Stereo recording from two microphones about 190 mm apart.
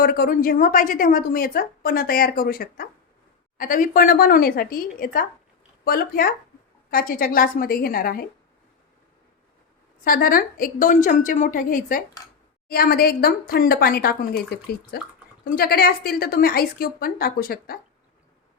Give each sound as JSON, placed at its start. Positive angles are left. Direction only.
{"t": 0.0, "sound": "a woman's voice", "side_deg": 50}
{"t": 10.0, "sound": "a woman's voice", "side_deg": 50}